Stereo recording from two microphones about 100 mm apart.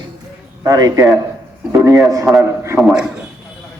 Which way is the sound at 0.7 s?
40° right (ahead or behind).